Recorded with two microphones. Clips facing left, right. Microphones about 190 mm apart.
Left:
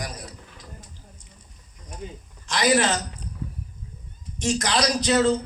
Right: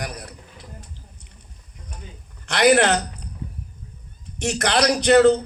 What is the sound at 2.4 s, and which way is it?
Speech, 65° right (ahead or behind).